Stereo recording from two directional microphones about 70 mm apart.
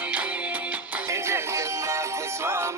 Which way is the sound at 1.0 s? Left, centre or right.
Right.